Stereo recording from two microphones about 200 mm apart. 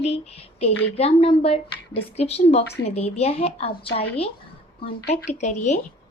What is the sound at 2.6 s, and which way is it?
Speech, 55° left (ahead or behind).